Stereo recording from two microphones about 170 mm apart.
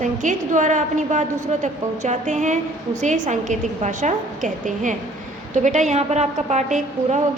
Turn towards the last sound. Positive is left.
turn(degrees=-45)  # may be behind; listen again after turning